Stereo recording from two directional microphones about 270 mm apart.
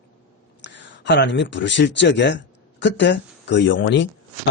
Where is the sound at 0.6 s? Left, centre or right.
Left.